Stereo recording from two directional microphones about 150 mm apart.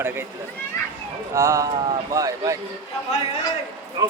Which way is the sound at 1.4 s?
20° right (ahead or behind).